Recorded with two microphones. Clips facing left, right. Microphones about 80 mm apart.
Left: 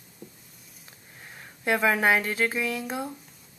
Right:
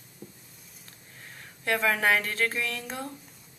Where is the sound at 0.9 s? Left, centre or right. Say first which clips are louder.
Left 2 dB; centre.